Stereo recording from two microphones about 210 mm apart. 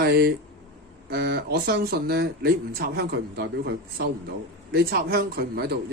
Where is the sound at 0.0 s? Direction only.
45° right (ahead or behind).